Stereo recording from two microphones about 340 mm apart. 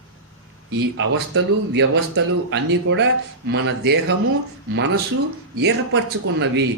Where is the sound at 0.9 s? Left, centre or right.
Right.